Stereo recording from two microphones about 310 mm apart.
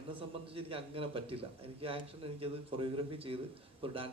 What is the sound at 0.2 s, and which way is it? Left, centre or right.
A man's voice, centre.